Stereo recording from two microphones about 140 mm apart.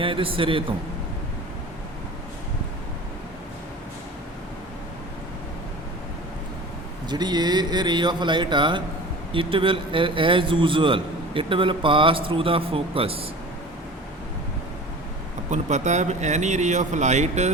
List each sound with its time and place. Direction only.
0.0 s a man's voice: 40° right (ahead or behind)
7.1 s a man's voice: 30° right (ahead or behind)
15.4 s speech: 55° right (ahead or behind)